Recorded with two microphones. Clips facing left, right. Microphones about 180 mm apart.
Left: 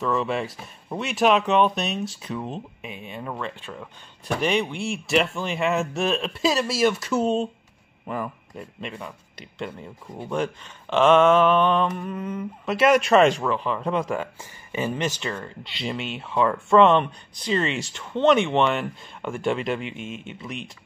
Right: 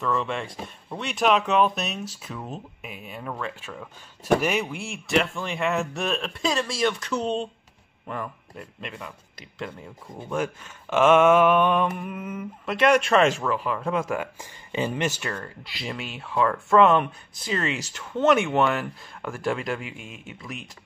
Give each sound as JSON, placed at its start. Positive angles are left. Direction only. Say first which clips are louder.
{"t": 0.0, "sound": "speech", "louder": "left 3 dB", "side_deg": 0}